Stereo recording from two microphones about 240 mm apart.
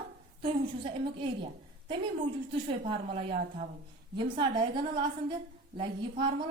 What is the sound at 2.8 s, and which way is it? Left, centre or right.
A woman's voice, right.